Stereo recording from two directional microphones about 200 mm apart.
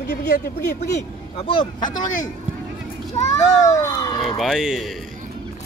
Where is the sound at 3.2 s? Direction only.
35° left (ahead or behind).